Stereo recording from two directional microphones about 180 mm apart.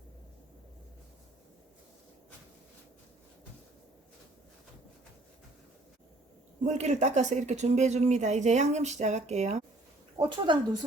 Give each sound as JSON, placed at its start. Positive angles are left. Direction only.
{"t": 6.7, "sound": "speech", "side_deg": -40}
{"t": 10.2, "sound": "a woman's voice", "side_deg": -25}